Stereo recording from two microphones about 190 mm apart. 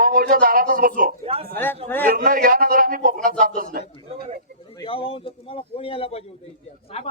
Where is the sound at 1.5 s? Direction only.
10° left (ahead or behind).